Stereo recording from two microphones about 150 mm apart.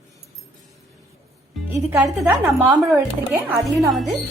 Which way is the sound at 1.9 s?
15° right (ahead or behind).